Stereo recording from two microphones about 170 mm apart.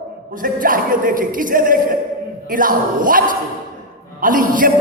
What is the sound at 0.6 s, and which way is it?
A man's voice, 55° right (ahead or behind).